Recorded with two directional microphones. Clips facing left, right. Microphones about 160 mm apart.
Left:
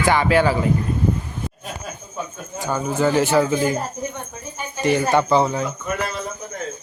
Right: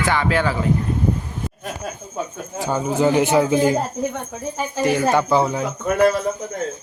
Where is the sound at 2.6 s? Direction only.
20° right (ahead or behind).